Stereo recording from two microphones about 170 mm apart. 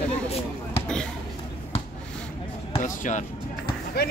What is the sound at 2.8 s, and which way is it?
Basketball bounce, 50° left (ahead or behind).